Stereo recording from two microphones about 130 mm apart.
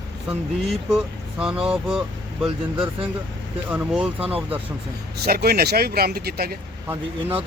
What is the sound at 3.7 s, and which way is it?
Speech, 10° right (ahead or behind).